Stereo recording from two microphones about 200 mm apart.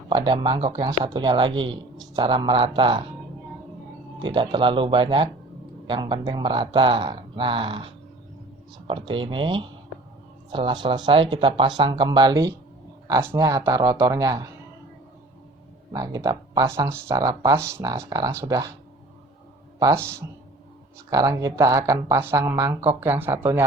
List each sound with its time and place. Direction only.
0.1 s speech: 20° right (ahead or behind)
4.2 s speech: 25° right (ahead or behind)
8.9 s speech: 25° right (ahead or behind)
15.9 s speech: 20° right (ahead or behind)
19.8 s speech: 15° right (ahead or behind)